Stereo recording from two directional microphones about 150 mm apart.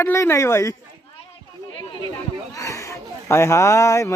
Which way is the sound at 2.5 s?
20° left (ahead or behind).